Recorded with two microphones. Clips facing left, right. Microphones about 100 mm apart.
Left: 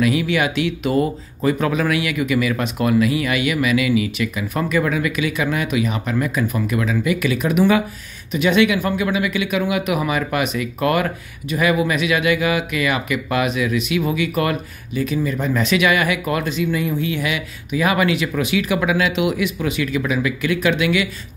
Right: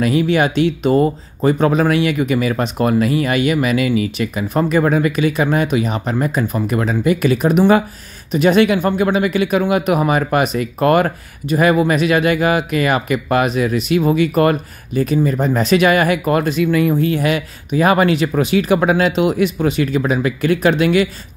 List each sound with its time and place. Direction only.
0.0 s speech: 35° right (ahead or behind); by 16.9 s 55° right (ahead or behind)
16.9 s speech: 45° right (ahead or behind)